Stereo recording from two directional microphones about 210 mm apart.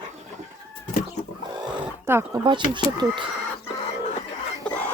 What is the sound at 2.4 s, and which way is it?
Speech, 20° right (ahead or behind).